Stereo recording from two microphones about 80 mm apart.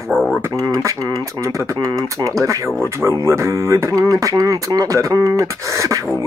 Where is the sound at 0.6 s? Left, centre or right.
Right.